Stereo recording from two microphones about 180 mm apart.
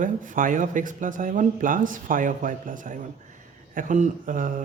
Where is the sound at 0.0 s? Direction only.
45° right (ahead or behind).